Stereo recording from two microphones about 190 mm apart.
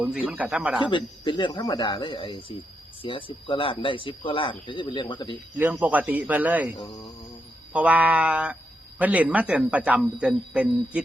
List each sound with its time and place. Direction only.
0.0 s speech: 5° right (ahead or behind)
0.8 s speech: 25° left (ahead or behind)
5.7 s a man's voice: 10° right (ahead or behind)